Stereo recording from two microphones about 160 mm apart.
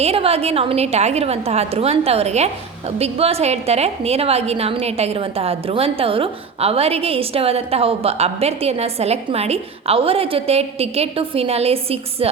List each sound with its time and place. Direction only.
0.0 s a woman's voice: 40° right (ahead or behind)